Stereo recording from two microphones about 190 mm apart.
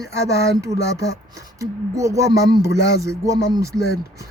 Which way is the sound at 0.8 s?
15° right (ahead or behind).